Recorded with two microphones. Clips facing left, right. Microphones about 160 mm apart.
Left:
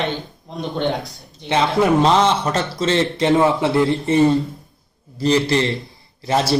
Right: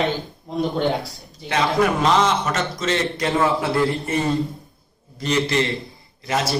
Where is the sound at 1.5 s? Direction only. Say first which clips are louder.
Left 3 dB; 30° left (ahead or behind).